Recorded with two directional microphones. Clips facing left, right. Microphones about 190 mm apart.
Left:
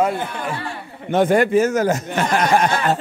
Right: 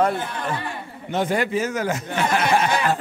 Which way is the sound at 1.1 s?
55° left (ahead or behind).